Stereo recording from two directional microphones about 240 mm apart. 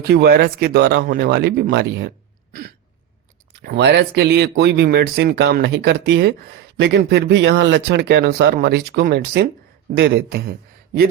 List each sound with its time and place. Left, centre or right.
0.0 s speech: right
2.5 s a sound: right
3.6 s speech: right